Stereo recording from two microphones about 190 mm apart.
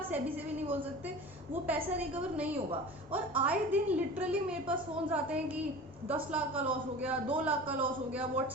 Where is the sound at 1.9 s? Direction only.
10° right (ahead or behind).